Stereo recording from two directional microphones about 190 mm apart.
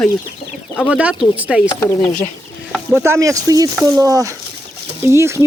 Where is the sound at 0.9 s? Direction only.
5° right (ahead or behind).